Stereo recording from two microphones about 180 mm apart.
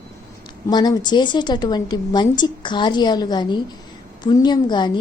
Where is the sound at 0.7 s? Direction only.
25° left (ahead or behind).